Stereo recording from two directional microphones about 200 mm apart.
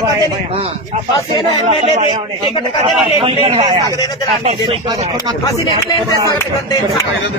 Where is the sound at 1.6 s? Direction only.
30° right (ahead or behind).